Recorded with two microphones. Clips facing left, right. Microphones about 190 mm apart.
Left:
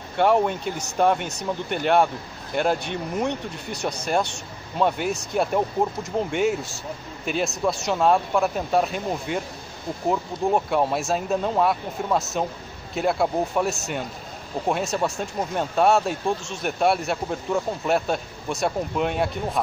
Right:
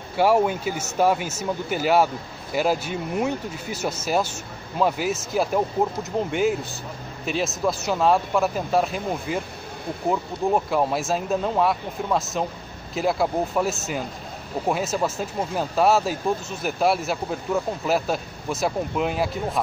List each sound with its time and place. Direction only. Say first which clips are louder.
0.1 s speech: right 1 dB; 5° right (ahead or behind)